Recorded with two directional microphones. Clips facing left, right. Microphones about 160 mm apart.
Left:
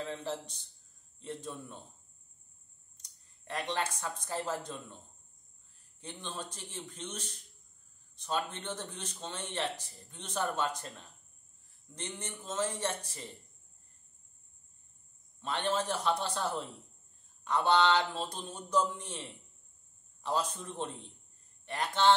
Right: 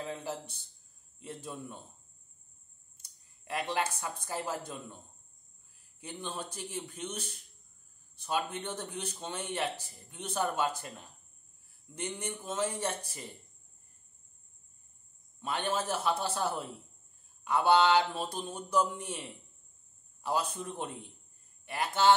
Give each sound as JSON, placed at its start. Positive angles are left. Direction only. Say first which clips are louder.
{"t": 0.2, "sound": "a man's voice", "louder": "left 1 dB", "side_deg": -10}
{"t": 3.0, "sound": "speech", "louder": "right 1 dB", "side_deg": -10}
{"t": 5.9, "sound": "a man's voice", "louder": "right 2 dB", "side_deg": -10}
{"t": 11.9, "sound": "a man's voice", "louder": "right 4 dB", "side_deg": -10}
{"t": 15.4, "sound": "a man's voice", "louder": "even", "side_deg": -10}
{"t": 17.5, "sound": "a man's voice", "louder": "right 2 dB", "side_deg": -10}
{"t": 20.2, "sound": "a man's voice", "louder": "right 1 dB", "side_deg": -10}